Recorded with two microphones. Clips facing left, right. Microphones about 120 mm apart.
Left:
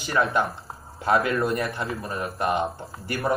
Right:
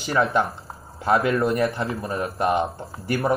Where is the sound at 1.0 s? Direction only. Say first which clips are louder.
Right 2 dB; 25° right (ahead or behind).